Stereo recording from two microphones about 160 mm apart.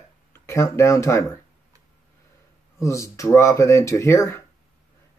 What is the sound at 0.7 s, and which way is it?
Speech, 15° left (ahead or behind).